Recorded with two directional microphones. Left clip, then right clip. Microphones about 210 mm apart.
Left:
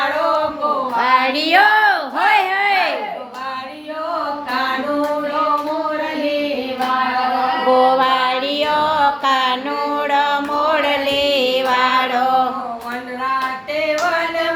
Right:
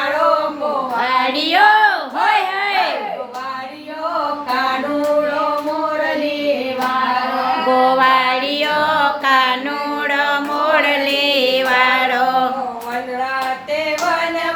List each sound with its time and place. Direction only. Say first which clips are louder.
0.9 s child singing: left 2 dB; 15° left (ahead or behind)
7.7 s music: right 1 dB; centre (ahead or behind)